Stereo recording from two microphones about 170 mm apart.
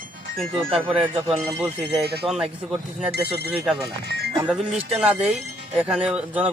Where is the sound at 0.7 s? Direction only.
30° right (ahead or behind).